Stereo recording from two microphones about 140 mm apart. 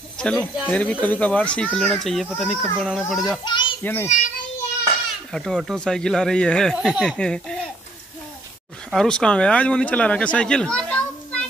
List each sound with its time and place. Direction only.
0.2 s speech: 5° left (ahead or behind)
3.4 s children playing: 35° left (ahead or behind)
3.8 s speech: 15° left (ahead or behind)
5.3 s speech: 5° left (ahead or behind)
6.8 s speech: 5° right (ahead or behind)
7.1 s speech: 5° left (ahead or behind)
8.9 s speech: 5° left (ahead or behind)